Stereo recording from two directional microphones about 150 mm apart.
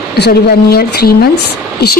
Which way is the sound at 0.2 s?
90° left.